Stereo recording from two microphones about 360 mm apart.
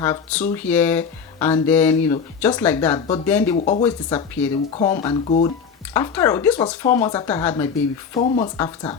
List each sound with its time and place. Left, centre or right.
0.0 s speech: centre